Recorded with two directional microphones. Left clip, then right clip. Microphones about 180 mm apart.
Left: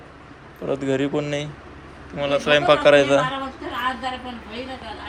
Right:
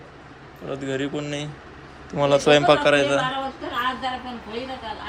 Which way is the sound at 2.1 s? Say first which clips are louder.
Right 2 dB; 35° right (ahead or behind).